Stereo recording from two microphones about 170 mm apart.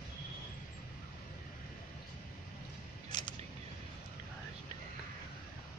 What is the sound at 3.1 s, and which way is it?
Single-lens reflex camera, 25° left (ahead or behind).